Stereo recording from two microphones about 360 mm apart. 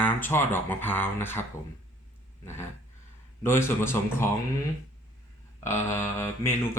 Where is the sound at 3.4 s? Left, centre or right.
Centre.